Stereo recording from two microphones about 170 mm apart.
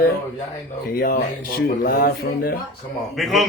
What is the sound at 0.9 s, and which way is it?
Speech, 60° left (ahead or behind).